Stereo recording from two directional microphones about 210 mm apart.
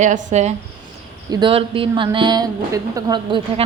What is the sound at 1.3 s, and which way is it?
A woman's voice, 25° right (ahead or behind).